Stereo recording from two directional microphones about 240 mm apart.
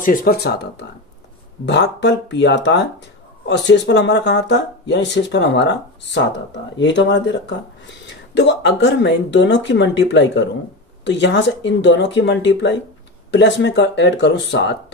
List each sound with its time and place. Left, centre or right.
0.0 s speech: left